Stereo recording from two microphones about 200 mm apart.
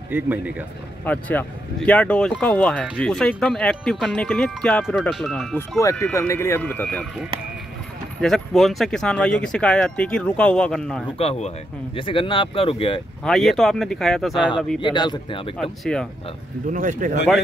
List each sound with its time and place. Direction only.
0.1 s speech: 10° right (ahead or behind)
1.0 s speech: 10° left (ahead or behind)
11.1 s speech: 30° left (ahead or behind)
13.2 s speech: centre (ahead or behind)
14.8 s speech: 25° left (ahead or behind)
15.5 s speech: centre (ahead or behind)
16.7 s speech: 40° right (ahead or behind)